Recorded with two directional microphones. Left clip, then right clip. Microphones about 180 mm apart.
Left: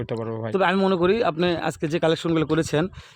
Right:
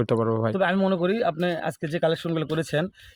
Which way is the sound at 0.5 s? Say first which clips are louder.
Left 3 dB; 40° left (ahead or behind).